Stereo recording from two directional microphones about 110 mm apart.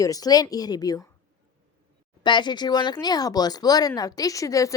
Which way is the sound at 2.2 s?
45° left (ahead or behind).